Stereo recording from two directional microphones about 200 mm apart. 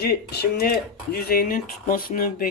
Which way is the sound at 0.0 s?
50° left (ahead or behind).